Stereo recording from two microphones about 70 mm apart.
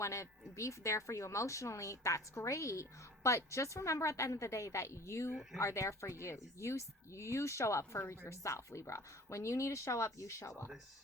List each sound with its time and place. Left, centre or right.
0.0 s speech: left